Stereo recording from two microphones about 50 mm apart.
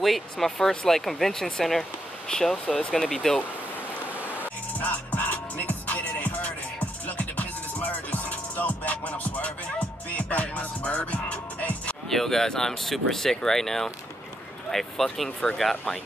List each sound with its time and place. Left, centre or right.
0.0 s speech: centre
3.2 s speech: centre
4.7 s music: left
12.1 s speech: centre